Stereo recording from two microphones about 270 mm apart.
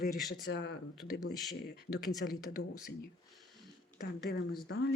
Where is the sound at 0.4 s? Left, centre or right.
Left.